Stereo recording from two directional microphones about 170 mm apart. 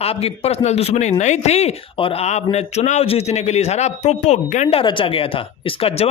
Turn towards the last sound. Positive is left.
turn(degrees=35)  # may be behind; listen again after turning